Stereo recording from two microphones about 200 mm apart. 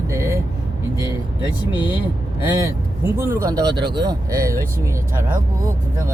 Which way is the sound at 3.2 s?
15° right (ahead or behind).